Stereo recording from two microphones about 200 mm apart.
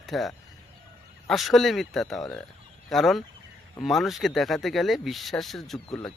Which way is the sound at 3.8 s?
Centre (ahead or behind).